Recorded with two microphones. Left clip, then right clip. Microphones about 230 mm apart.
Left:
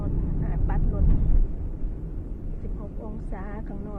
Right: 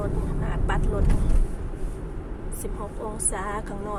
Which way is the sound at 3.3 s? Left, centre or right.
Centre.